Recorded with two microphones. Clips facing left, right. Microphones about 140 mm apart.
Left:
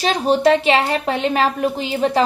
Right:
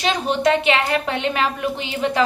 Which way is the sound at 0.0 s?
35° left (ahead or behind).